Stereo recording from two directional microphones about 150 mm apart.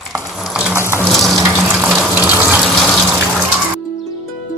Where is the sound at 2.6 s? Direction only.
Centre (ahead or behind).